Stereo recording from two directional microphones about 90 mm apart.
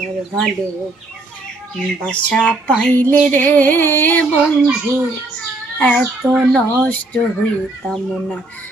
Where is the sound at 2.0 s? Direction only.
15° left (ahead or behind).